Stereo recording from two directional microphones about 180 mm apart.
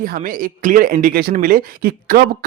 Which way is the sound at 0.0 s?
50° right (ahead or behind).